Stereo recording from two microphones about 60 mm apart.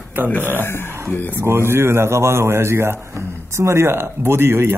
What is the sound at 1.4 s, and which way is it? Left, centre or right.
Speech, right.